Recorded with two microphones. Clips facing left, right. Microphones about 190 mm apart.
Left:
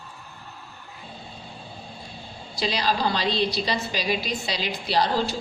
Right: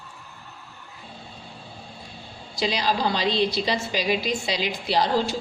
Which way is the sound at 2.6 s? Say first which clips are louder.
Right 1 dB; 20° right (ahead or behind).